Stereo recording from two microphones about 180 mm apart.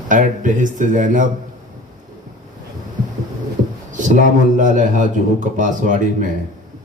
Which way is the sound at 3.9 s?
45° right (ahead or behind).